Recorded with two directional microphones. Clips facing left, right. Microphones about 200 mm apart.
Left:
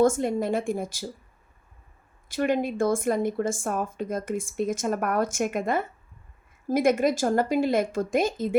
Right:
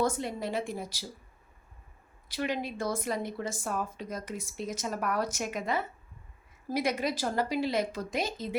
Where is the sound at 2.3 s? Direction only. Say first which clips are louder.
Left 8 dB; 50° left (ahead or behind).